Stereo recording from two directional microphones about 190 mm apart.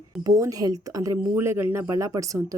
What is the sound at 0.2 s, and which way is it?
Speech, 20° right (ahead or behind).